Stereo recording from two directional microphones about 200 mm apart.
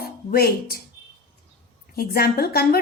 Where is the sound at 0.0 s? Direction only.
50° left (ahead or behind).